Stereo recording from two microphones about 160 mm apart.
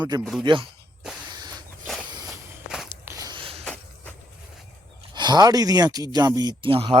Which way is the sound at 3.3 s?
35° right (ahead or behind).